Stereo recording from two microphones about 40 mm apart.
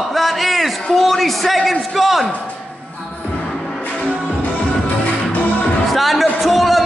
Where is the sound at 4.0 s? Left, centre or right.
Left.